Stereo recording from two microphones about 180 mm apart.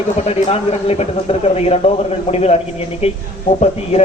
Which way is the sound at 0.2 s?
35° left (ahead or behind).